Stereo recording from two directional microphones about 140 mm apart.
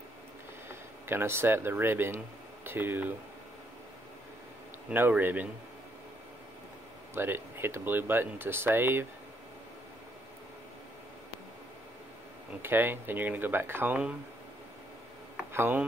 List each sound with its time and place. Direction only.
0.7 s speech: 15° right (ahead or behind)
4.9 s speech: 15° right (ahead or behind)
7.2 s speech: 15° right (ahead or behind)
12.6 s speech: 15° right (ahead or behind)
15.5 s speech: 15° right (ahead or behind)